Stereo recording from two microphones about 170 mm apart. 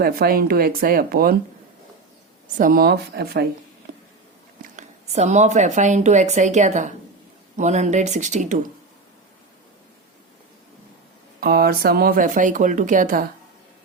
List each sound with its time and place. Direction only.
0.0 s speech: 60° right (ahead or behind)
2.6 s speech: 55° right (ahead or behind)
4.6 s speech: 45° right (ahead or behind)
11.3 s speech: 60° right (ahead or behind)